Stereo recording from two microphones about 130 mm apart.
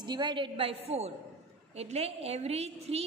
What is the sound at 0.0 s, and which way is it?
A woman's voice, 35° right (ahead or behind).